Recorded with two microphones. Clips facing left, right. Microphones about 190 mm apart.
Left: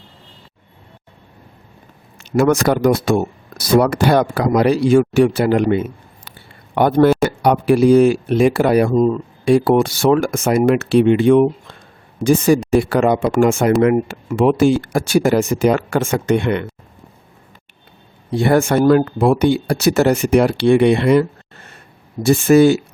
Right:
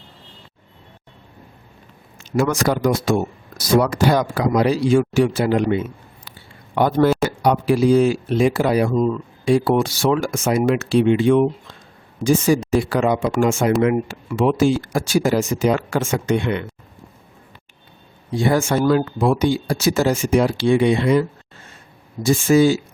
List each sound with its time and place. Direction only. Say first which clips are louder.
2.1 s speech: left 5 dB; 60° left (ahead or behind)
9.0 s speech: left 4 dB; 35° left (ahead or behind)
9.4 s speech: left 4 dB; 60° left (ahead or behind)
18.3 s speech: left 4 dB; 65° left (ahead or behind)